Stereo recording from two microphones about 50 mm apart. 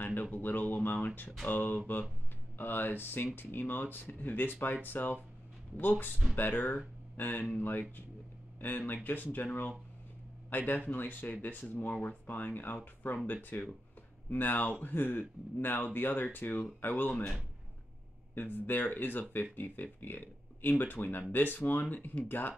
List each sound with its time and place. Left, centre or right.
0.0 s a sound: left
1.0 s speech: left
12.0 s speech: left
18.3 s speech: left